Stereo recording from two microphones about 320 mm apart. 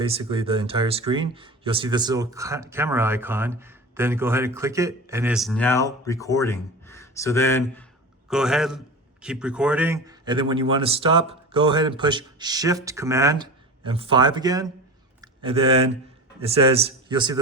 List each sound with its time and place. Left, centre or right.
0.0 s a man's voice: centre